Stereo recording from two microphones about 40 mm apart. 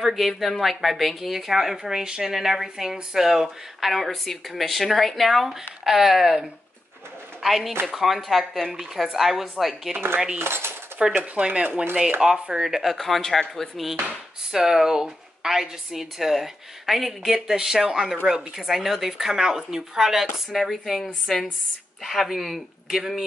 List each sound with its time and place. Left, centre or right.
0.0 s speech: centre
7.4 s speech: centre
10.4 s speech: right
11.1 s speech: right
12.6 s speech: centre
12.9 s speech: centre
14.5 s speech: centre